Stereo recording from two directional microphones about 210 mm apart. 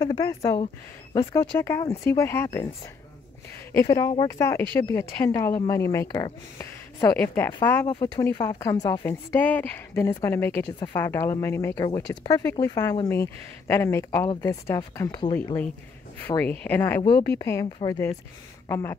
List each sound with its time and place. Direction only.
0.0 s speech: 15° left (ahead or behind)
3.7 s speech: 15° left (ahead or behind)
16.3 s speech: 10° left (ahead or behind)
17.0 s a woman's voice: 20° left (ahead or behind)